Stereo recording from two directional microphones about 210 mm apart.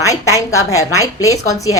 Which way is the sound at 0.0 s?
15° left (ahead or behind).